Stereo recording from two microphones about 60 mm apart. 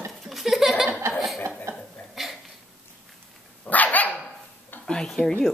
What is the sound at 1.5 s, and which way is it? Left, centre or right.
Chuckle, right.